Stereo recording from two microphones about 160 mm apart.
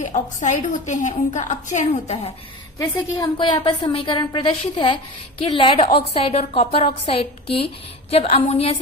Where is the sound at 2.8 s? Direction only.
25° left (ahead or behind).